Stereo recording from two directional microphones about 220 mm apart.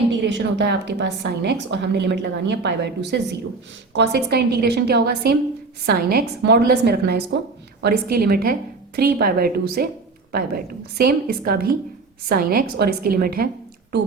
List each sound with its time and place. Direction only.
0.3 s a woman's voice: 55° right (ahead or behind)